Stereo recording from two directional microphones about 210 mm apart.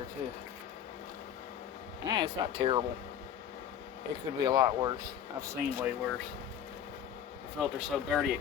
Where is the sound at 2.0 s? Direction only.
20° right (ahead or behind).